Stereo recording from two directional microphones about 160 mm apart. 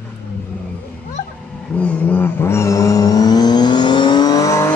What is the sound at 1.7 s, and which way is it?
Vehicle, 10° left (ahead or behind).